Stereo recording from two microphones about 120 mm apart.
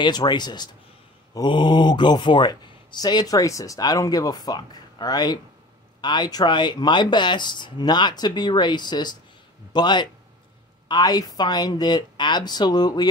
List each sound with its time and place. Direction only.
0.0 s speech: 40° left (ahead or behind)